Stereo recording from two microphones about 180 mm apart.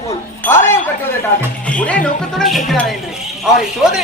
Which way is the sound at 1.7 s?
5° left (ahead or behind).